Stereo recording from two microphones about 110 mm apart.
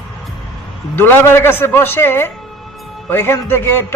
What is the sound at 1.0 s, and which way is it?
A man's voice, 20° left (ahead or behind).